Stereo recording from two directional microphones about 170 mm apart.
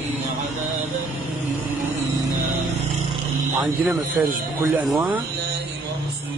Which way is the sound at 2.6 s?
40° right (ahead or behind).